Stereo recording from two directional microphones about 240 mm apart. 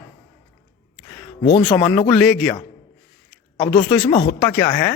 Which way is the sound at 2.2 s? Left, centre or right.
Centre.